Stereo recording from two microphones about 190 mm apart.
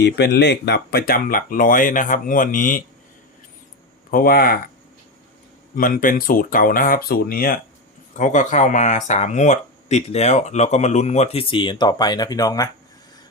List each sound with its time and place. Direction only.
0.0 s speech: 60° left (ahead or behind); by 2.8 s 45° left (ahead or behind)
4.1 s speech: 50° left (ahead or behind)
5.7 s speech: 45° left (ahead or behind); by 12.6 s 20° left (ahead or behind)